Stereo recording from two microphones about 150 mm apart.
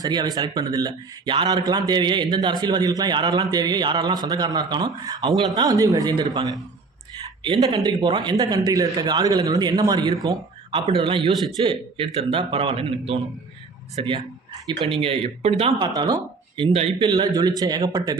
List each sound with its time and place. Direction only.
0.0 s a man's voice: 25° right (ahead or behind)
7.2 s a sound: 30° right (ahead or behind)
7.9 s a man's voice: 30° right (ahead or behind)
10.7 s speech: 40° right (ahead or behind)
15.8 s speech: 30° right (ahead or behind)
16.7 s a man's voice: 45° right (ahead or behind)
17.2 s a man's voice: 25° right (ahead or behind)